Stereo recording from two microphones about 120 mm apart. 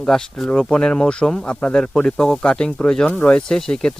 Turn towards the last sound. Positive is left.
turn(degrees=5)  # may be behind; listen again after turning